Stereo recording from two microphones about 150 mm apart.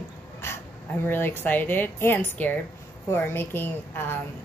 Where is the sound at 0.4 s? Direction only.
15° left (ahead or behind).